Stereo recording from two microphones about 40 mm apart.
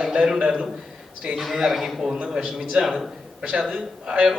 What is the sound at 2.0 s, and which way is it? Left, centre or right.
Speech, centre.